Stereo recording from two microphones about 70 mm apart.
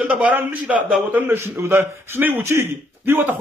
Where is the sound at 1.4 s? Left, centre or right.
Right.